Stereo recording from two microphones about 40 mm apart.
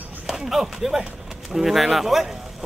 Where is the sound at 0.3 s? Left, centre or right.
Centre.